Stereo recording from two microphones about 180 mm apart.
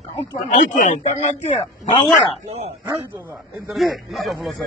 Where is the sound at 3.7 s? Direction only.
Centre (ahead or behind).